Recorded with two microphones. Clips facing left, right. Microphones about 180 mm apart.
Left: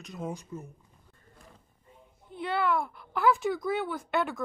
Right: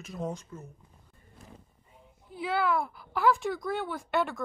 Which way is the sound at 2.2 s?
5° right (ahead or behind).